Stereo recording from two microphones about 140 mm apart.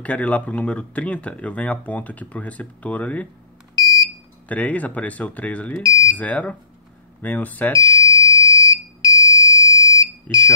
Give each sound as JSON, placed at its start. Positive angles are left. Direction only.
{"t": 0.0, "sound": "speech", "side_deg": 10}
{"t": 3.7, "sound": "smoke detector", "side_deg": 25}
{"t": 4.5, "sound": "speech", "side_deg": 10}
{"t": 5.8, "sound": "speech", "side_deg": 25}
{"t": 6.1, "sound": "speech", "side_deg": 10}
{"t": 8.1, "sound": "fire alarm", "side_deg": 25}
{"t": 10.3, "sound": "speech", "side_deg": 10}